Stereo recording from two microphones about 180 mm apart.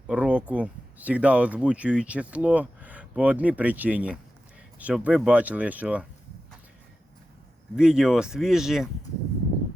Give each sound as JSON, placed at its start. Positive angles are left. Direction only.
{"t": 0.1, "sound": "speech", "side_deg": -5}
{"t": 7.8, "sound": "speech", "side_deg": -5}